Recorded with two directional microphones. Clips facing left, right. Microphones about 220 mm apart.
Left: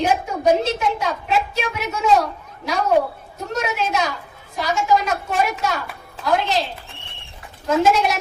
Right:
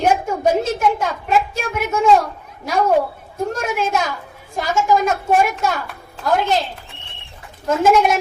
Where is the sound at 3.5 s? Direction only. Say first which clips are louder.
Left 1 dB; 50° right (ahead or behind).